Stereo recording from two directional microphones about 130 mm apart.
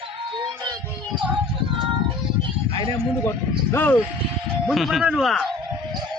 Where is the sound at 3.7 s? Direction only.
15° left (ahead or behind).